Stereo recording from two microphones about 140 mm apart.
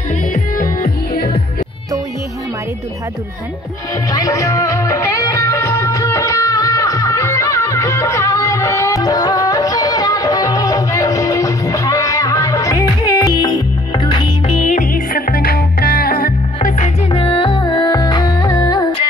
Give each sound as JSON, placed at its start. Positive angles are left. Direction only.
{"t": 0.3, "sound": "music", "side_deg": 80}
{"t": 4.1, "sound": "music", "side_deg": 25}
{"t": 14.7, "sound": "music", "side_deg": 80}
{"t": 16.6, "sound": "music", "side_deg": 60}
{"t": 17.1, "sound": "music", "side_deg": 40}